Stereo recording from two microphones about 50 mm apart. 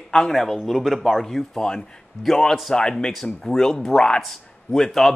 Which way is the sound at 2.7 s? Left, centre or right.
Centre.